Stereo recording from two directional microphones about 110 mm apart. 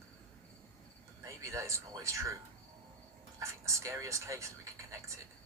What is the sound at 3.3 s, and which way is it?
Speech, 30° right (ahead or behind).